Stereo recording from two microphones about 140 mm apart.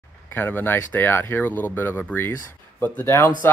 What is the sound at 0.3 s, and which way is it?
Speech, 15° left (ahead or behind).